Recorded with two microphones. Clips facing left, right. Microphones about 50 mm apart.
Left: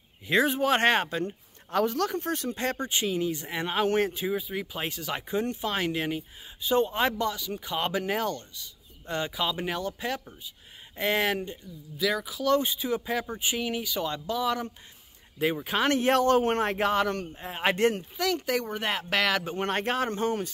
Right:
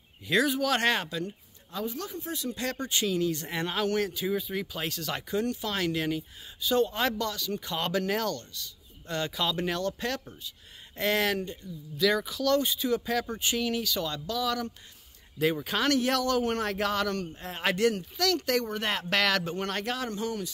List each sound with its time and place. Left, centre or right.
0.3 s speech: left
1.7 s speech: left
4.3 s speech: centre
12.4 s speech: centre
17.7 s speech: left
18.1 s speech: centre; by 20.5 s left